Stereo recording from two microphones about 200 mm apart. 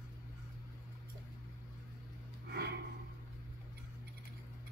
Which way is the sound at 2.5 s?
55° right (ahead or behind).